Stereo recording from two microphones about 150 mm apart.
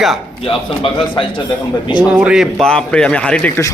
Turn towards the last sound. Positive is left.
turn(degrees=5)  # may be behind; listen again after turning